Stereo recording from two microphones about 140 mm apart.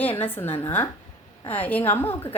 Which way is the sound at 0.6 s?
15° left (ahead or behind).